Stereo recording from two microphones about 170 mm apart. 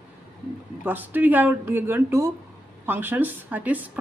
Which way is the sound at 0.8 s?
10° right (ahead or behind).